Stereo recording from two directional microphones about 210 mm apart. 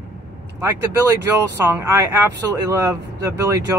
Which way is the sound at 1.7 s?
15° right (ahead or behind).